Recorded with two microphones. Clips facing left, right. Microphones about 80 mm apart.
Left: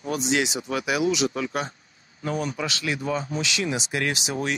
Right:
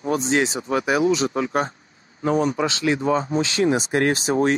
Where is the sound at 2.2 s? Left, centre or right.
Right.